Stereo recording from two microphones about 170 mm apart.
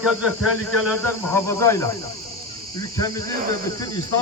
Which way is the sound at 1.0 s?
15° left (ahead or behind).